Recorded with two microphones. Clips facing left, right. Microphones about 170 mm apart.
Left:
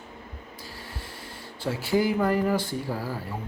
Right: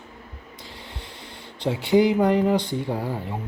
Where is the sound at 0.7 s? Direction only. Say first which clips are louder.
Right 1 dB; 20° right (ahead or behind).